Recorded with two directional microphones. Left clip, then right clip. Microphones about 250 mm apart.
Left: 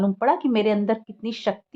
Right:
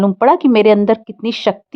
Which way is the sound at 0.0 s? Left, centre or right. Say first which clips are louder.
Right 10 dB; right.